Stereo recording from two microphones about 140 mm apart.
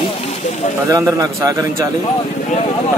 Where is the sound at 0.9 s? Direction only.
25° right (ahead or behind).